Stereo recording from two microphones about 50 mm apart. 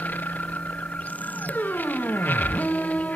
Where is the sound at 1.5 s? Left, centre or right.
Left.